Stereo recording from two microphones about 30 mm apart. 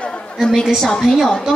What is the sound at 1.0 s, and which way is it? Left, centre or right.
Speech, centre.